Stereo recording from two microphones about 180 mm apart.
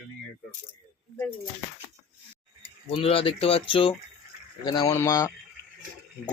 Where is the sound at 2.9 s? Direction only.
30° left (ahead or behind).